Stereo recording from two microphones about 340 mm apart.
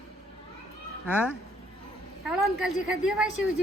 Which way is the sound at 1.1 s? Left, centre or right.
Centre.